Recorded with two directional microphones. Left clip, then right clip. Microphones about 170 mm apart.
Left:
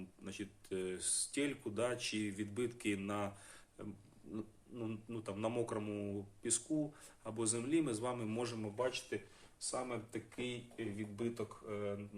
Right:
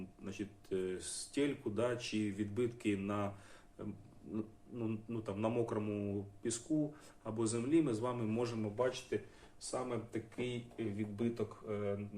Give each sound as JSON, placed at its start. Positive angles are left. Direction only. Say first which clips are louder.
{"t": 0.3, "sound": "speech", "louder": "right 3 dB", "side_deg": 20}
{"t": 9.6, "sound": "speech", "louder": "right 2 dB", "side_deg": 25}